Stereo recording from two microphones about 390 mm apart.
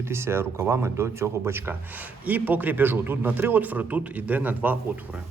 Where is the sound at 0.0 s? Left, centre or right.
Centre.